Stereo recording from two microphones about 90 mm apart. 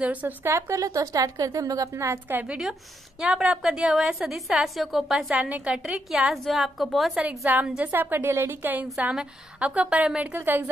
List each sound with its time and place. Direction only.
0.0 s a woman's voice: 15° right (ahead or behind)
0.5 s a woman's voice: 35° right (ahead or behind)
2.2 s a woman's voice: 15° right (ahead or behind); by 5.2 s centre (ahead or behind)
5.3 s a woman's voice: 15° right (ahead or behind)
7.2 s a woman's voice: 15° right (ahead or behind)
7.9 s a woman's voice: 25° right (ahead or behind)
9.1 s a woman's voice: 10° right (ahead or behind)